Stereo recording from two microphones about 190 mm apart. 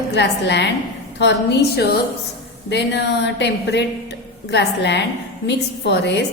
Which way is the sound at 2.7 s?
65° left (ahead or behind).